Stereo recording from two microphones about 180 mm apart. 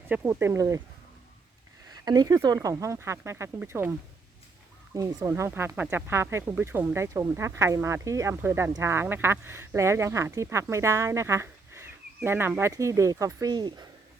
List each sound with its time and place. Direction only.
0.1 s speech: 10° right (ahead or behind)
2.0 s speech: 20° right (ahead or behind)
4.9 s speech: 15° right (ahead or behind)